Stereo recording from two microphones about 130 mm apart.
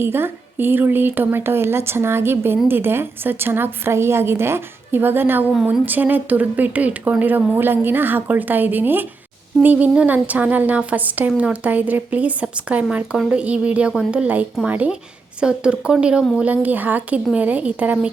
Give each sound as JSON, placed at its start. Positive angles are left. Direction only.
{"t": 0.0, "sound": "a woman's voice", "side_deg": -15}